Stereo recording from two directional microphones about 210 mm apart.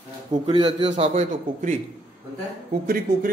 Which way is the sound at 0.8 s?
30° right (ahead or behind).